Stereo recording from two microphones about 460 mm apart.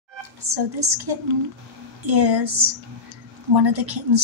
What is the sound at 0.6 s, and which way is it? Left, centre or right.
A woman's voice, right.